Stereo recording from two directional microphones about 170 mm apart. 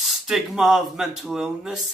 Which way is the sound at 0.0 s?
Centre (ahead or behind).